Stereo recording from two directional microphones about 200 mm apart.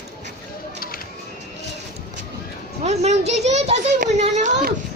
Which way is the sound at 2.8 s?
35° right (ahead or behind).